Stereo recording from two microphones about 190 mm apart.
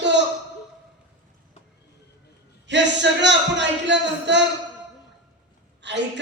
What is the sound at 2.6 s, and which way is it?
Speech, 65° right (ahead or behind).